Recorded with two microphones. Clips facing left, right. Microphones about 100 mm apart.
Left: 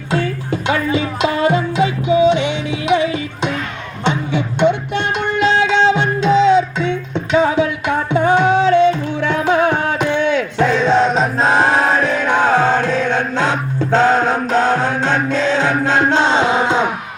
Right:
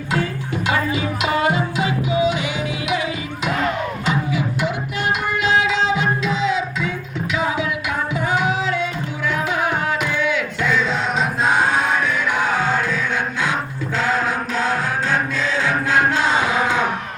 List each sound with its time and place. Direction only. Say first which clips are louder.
0.1 s music: left 4 dB; 30° left (ahead or behind)